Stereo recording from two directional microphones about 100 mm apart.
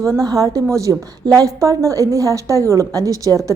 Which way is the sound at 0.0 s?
35° right (ahead or behind).